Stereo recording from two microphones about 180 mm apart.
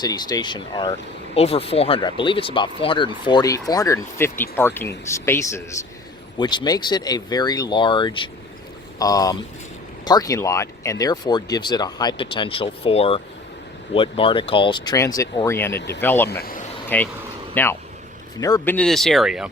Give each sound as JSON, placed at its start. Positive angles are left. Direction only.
{"t": 0.0, "sound": "speech", "side_deg": 20}
{"t": 16.3, "sound": "speech", "side_deg": 55}
{"t": 16.9, "sound": "speech", "side_deg": 10}